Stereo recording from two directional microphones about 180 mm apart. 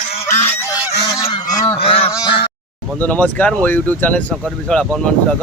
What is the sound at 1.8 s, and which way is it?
Goose, 30° left (ahead or behind).